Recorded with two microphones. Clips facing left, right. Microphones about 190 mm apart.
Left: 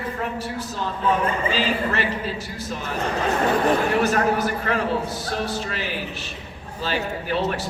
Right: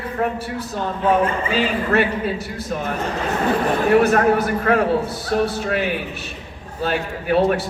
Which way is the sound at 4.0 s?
60° right (ahead or behind).